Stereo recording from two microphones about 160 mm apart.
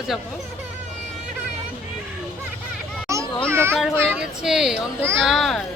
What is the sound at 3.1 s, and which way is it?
Children playing, 20° right (ahead or behind).